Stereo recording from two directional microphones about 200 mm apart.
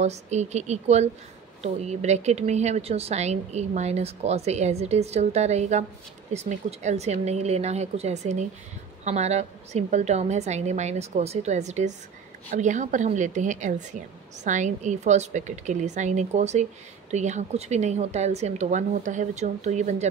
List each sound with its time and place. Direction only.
0.0 s a woman's voice: 35° right (ahead or behind)